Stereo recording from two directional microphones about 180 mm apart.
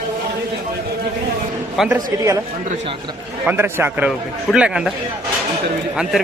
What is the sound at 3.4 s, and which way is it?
A man's voice, 10° right (ahead or behind).